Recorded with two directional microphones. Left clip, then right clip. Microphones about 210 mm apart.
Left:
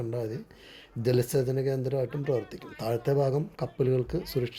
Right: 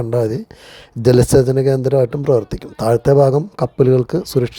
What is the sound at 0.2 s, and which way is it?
A man's voice, 90° right.